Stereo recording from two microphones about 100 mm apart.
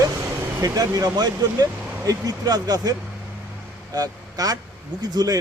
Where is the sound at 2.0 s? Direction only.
40° right (ahead or behind).